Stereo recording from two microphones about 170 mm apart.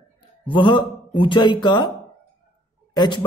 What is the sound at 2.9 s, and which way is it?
Speech, 25° left (ahead or behind).